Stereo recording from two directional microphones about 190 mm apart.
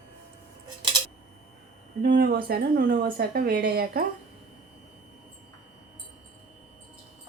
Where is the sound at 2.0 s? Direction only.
60° right (ahead or behind).